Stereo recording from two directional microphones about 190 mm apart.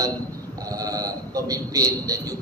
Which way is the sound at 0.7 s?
20° right (ahead or behind).